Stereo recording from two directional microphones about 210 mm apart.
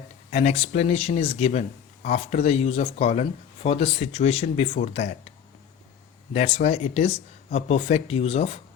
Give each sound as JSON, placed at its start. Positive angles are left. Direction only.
{"t": 0.3, "sound": "speech", "side_deg": 30}
{"t": 6.3, "sound": "speech", "side_deg": 30}